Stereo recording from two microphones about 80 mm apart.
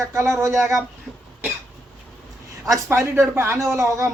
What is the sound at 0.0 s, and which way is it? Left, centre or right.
Speech, right.